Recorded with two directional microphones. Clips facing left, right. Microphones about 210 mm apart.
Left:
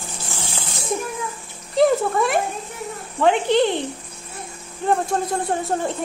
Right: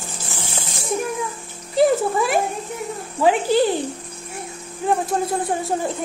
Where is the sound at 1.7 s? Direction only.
5° right (ahead or behind).